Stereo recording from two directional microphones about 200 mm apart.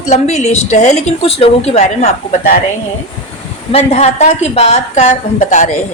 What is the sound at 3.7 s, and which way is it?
A woman's voice, 30° left (ahead or behind).